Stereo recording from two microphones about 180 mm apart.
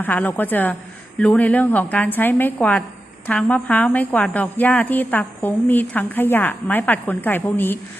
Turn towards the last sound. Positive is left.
turn(degrees=10)  # may be behind; listen again after turning